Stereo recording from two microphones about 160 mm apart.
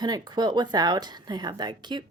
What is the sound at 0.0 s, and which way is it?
A woman's voice, 25° right (ahead or behind).